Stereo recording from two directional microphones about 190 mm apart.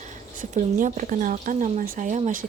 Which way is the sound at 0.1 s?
40° right (ahead or behind).